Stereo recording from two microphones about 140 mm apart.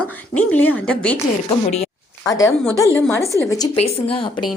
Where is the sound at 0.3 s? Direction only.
10° left (ahead or behind).